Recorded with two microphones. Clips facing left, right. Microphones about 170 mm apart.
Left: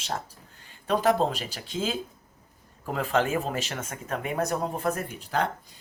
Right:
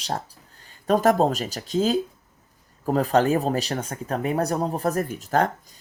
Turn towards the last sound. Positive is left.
turn(degrees=-45)  # may be behind; listen again after turning